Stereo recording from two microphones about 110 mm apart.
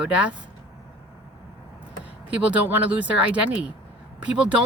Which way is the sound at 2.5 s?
15° right (ahead or behind).